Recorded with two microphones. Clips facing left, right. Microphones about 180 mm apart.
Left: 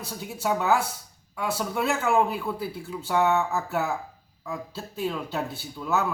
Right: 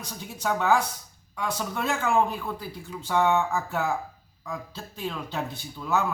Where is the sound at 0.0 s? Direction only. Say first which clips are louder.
Left 2 dB; 5° left (ahead or behind).